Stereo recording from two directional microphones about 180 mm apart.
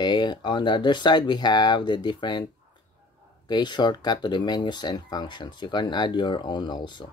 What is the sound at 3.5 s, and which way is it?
Speech, 25° left (ahead or behind).